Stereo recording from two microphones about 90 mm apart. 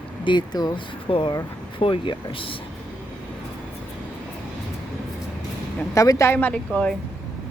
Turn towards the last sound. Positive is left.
turn(degrees=10)  # may be behind; listen again after turning